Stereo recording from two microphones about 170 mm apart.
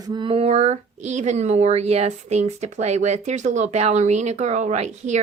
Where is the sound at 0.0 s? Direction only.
25° right (ahead or behind).